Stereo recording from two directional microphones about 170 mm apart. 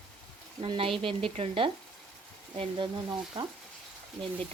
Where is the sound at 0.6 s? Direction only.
30° right (ahead or behind).